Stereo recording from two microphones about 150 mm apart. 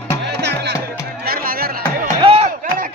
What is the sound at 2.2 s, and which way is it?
Chop, 40° right (ahead or behind).